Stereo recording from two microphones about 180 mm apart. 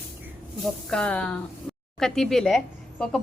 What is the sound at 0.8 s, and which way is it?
Speech, 5° left (ahead or behind).